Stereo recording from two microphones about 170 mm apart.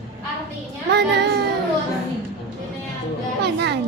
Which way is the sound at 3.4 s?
80° right.